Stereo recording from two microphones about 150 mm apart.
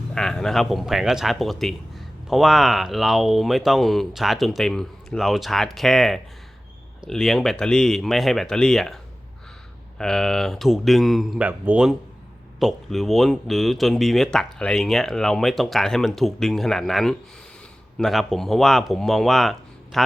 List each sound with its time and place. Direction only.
0.1 s a man's voice: 5° left (ahead or behind)
10.0 s a man's voice: 5° left (ahead or behind)